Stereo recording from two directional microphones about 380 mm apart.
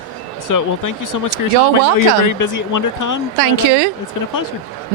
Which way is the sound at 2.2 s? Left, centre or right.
Left.